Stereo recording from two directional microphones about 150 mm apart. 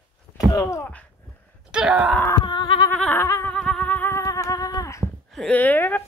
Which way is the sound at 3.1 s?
20° left (ahead or behind).